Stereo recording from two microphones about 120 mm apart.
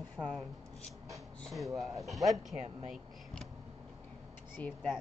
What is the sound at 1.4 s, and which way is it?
Speech, centre (ahead or behind).